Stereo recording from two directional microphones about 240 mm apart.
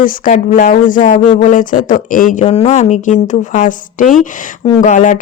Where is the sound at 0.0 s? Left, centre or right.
Left.